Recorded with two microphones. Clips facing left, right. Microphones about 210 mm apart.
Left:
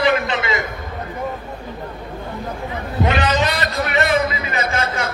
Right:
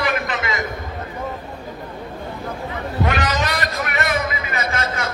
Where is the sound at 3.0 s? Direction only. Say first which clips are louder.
Left 4 dB; 20° left (ahead or behind).